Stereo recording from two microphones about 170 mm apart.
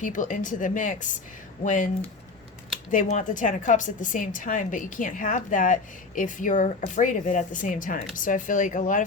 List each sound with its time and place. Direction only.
0.0 s a woman's voice: 50° left (ahead or behind)
2.9 s a woman's voice: 45° left (ahead or behind)